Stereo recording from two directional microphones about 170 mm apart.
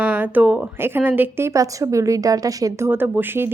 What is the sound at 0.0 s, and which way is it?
Speech, 10° right (ahead or behind).